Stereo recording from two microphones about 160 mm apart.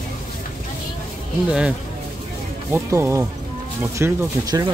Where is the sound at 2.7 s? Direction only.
15° right (ahead or behind).